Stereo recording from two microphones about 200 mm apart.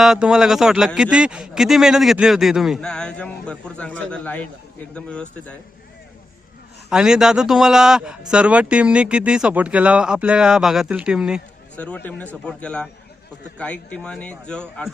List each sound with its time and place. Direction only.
0.0 s speech: centre (ahead or behind)
6.9 s speech: 5° right (ahead or behind)
11.8 s speech: 10° left (ahead or behind)